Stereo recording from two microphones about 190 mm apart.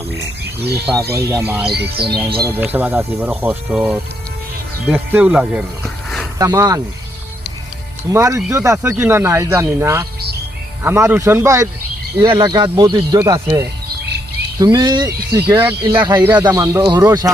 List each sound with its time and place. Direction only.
0.2 s frog: 60° right (ahead or behind)
1.1 s speech: 15° right (ahead or behind)
1.7 s speech: 60° right (ahead or behind)
2.4 s speech: 10° right (ahead or behind)
6.4 s speech: 20° right (ahead or behind)
8.1 s speech: 15° right (ahead or behind)